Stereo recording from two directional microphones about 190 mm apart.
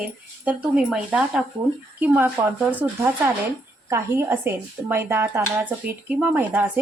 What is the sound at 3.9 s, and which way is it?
Speech, 15° right (ahead or behind).